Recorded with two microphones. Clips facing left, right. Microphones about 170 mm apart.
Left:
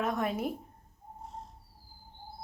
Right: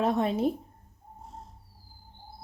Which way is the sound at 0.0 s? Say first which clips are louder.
Right 6 dB; 30° right (ahead or behind).